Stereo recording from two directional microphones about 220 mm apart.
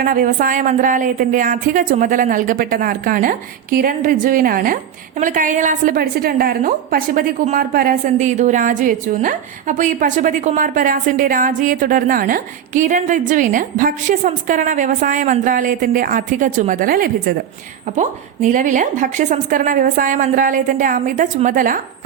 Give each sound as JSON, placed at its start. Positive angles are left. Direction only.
{"t": 0.0, "sound": "speech", "side_deg": -40}